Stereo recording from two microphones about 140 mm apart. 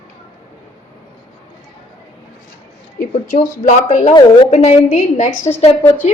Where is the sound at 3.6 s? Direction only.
60° left (ahead or behind).